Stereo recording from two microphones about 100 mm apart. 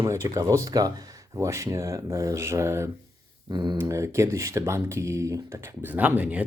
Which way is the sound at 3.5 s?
45° right (ahead or behind).